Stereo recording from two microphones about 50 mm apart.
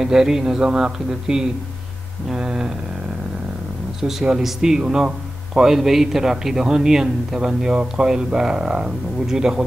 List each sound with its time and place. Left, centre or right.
0.0 s a man's voice: centre
2.2 s a sound: centre
4.4 s a man's voice: centre